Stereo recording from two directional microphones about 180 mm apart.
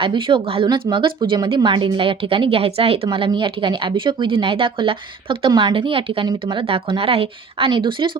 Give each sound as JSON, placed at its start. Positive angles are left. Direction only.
{"t": 0.0, "sound": "speech", "side_deg": -30}